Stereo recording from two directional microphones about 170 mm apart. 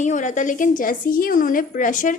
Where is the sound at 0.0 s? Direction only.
45° left (ahead or behind).